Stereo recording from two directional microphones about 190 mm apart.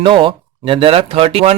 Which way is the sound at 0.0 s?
25° right (ahead or behind).